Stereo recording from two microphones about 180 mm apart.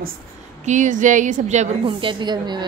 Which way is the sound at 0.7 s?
45° right (ahead or behind).